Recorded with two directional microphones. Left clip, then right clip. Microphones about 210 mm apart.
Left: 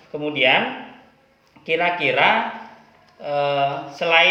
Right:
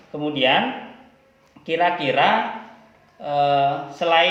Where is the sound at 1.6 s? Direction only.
25° left (ahead or behind).